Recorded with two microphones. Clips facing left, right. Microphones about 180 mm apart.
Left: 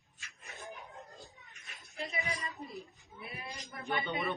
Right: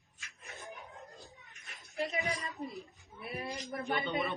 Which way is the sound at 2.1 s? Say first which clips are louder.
Right 1 dB; 40° right (ahead or behind).